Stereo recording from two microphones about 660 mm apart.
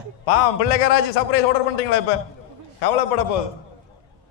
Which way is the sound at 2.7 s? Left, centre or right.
Left.